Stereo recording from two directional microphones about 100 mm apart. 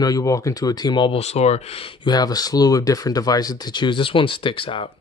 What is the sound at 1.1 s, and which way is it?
Speech, 90° left.